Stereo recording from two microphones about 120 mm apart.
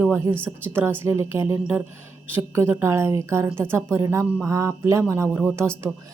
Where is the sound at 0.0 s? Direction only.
20° right (ahead or behind).